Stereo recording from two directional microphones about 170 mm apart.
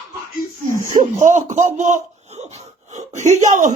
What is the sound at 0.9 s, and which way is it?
Speech, 45° right (ahead or behind).